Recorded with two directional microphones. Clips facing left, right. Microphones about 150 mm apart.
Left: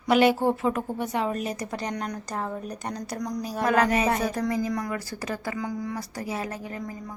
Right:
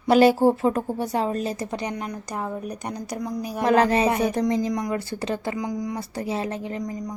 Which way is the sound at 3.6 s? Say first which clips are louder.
Right 4 dB; 30° right (ahead or behind).